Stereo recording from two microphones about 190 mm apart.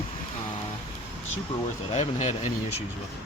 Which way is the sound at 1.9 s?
35° left (ahead or behind).